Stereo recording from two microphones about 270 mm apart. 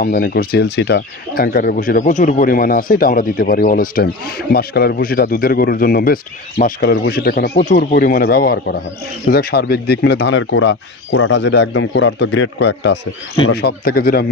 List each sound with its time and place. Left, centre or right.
0.0 s speech: left